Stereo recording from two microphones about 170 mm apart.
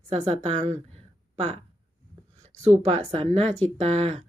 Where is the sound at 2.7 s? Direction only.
45° right (ahead or behind).